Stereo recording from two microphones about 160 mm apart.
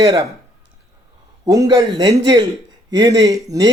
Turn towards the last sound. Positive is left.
turn(degrees=-20)  # may be behind; listen again after turning